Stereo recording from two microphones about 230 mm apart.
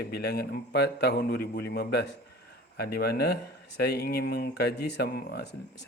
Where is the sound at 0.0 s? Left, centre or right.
Left.